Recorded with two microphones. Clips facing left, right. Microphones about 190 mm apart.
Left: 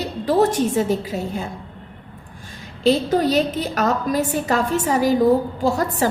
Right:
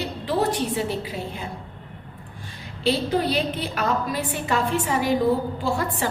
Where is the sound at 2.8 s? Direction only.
45° left (ahead or behind).